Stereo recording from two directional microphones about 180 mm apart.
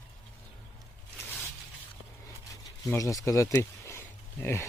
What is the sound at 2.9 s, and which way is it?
Speech, 20° left (ahead or behind).